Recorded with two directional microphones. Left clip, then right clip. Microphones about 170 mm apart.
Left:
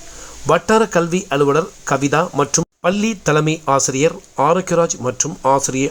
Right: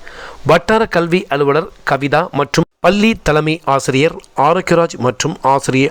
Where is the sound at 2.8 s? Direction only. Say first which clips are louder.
Right 8 dB; 30° right (ahead or behind).